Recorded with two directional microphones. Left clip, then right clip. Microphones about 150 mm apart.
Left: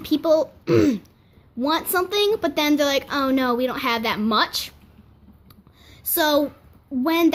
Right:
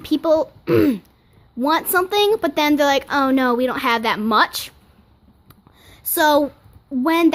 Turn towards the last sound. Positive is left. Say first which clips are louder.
# right 3 dB
turn(degrees=-35)  # may be behind; listen again after turning